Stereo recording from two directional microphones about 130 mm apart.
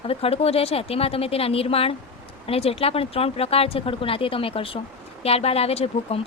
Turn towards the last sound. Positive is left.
turn(degrees=50)  # may be behind; listen again after turning